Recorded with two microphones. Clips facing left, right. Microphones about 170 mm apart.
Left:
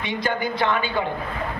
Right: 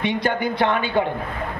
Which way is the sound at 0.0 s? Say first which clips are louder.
Right 3 dB; 60° right (ahead or behind).